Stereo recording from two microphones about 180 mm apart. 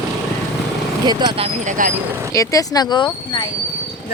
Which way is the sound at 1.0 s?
25° right (ahead or behind).